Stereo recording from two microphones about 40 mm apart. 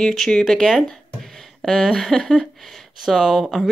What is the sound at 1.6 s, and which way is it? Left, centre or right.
Speech, centre.